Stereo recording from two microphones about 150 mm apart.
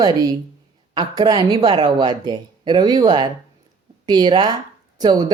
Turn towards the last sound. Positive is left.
turn(degrees=-25)  # may be behind; listen again after turning